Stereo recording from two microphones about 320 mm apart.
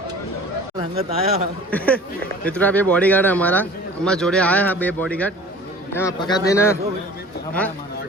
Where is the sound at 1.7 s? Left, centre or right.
Centre.